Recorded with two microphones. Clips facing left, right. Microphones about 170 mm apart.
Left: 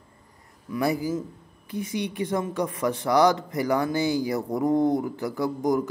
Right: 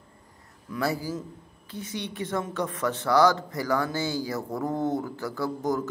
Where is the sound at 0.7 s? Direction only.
10° left (ahead or behind).